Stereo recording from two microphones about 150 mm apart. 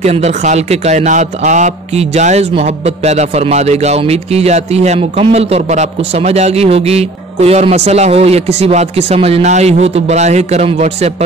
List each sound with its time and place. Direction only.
0.0 s a man's voice: 45° right (ahead or behind)